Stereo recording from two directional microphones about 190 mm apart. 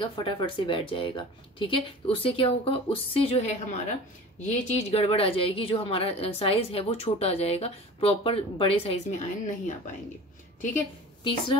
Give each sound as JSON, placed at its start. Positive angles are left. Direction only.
{"t": 0.0, "sound": "a woman's voice", "side_deg": 25}